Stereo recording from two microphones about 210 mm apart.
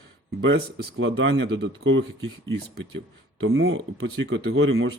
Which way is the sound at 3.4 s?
55° right (ahead or behind).